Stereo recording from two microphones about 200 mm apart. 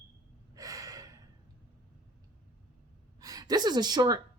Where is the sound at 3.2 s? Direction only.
20° right (ahead or behind).